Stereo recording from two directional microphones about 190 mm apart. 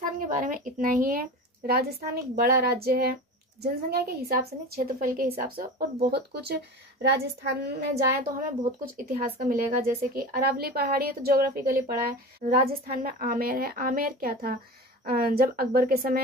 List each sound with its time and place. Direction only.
0.3 s a woman's voice: 45° right (ahead or behind); by 7.8 s 60° right (ahead or behind)
8.2 s a woman's voice: 50° right (ahead or behind)